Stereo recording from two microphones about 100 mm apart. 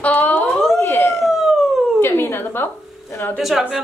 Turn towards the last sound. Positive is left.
turn(degrees=-5)  # may be behind; listen again after turning